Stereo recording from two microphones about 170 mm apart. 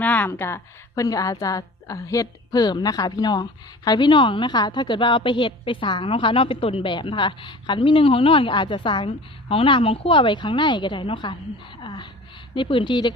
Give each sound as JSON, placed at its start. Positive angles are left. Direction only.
{"t": 0.0, "sound": "a woman's voice", "side_deg": 10}